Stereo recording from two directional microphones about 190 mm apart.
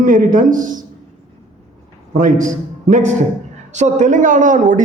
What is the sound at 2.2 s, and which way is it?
A man's voice, 45° right (ahead or behind).